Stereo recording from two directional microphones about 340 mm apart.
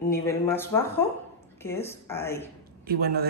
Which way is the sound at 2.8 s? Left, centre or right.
Right.